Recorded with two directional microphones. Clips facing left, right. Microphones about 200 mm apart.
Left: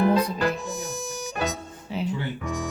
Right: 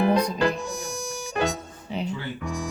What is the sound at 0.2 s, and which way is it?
Music, 5° left (ahead or behind).